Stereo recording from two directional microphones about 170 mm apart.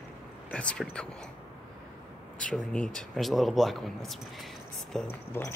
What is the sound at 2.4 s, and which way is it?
Speech, 5° left (ahead or behind).